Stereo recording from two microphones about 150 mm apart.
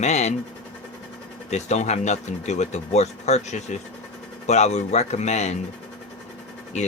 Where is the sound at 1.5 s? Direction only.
50° left (ahead or behind).